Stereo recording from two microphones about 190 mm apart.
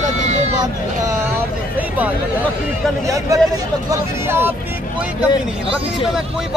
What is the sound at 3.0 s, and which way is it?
Speech, 15° right (ahead or behind).